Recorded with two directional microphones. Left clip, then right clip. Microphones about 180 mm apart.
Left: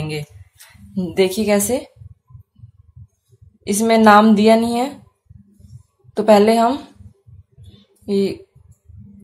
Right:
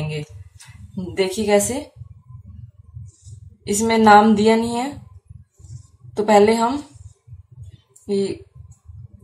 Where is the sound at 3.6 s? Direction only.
45° left (ahead or behind).